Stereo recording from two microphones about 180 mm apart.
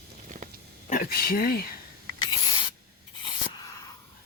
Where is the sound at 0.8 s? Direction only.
50° left (ahead or behind).